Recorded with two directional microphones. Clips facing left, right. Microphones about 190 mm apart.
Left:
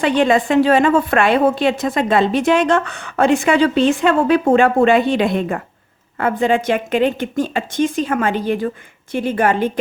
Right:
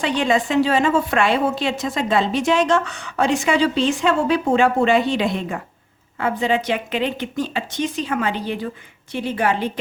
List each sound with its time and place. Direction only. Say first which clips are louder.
0.0 s a woman's voice: left 5 dB; 55° left (ahead or behind)